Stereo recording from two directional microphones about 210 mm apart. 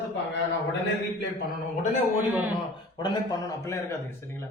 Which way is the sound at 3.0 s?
20° left (ahead or behind).